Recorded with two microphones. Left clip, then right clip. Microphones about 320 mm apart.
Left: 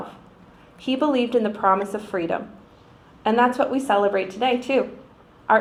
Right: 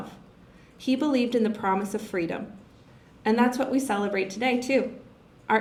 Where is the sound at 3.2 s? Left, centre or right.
Right.